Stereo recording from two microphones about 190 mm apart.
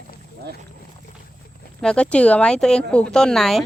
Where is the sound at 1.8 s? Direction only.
5° left (ahead or behind).